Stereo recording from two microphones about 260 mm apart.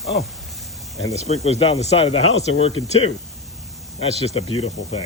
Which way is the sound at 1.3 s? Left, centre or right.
Left.